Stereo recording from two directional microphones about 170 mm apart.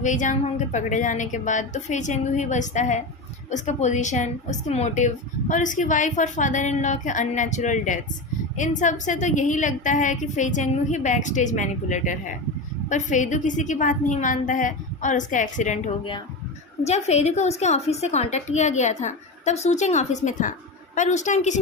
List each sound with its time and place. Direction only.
0.0 s a woman's voice: 50° left (ahead or behind)
16.8 s a woman's voice: 40° left (ahead or behind)